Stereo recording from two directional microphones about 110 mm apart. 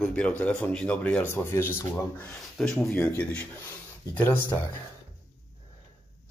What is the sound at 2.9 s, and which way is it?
Speech, 15° left (ahead or behind).